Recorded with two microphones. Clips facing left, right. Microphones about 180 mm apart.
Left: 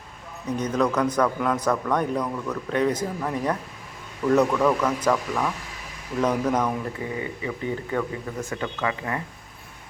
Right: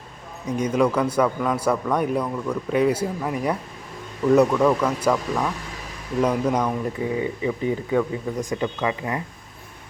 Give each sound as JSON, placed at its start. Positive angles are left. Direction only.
{"t": 0.4, "sound": "a man's voice", "side_deg": -10}
{"t": 7.2, "sound": "a man's voice", "side_deg": -20}